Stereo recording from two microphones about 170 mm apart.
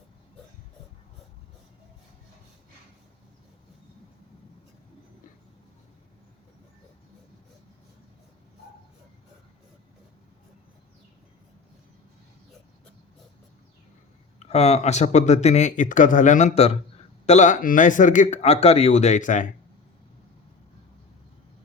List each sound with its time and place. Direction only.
14.3 s speech: 40° left (ahead or behind)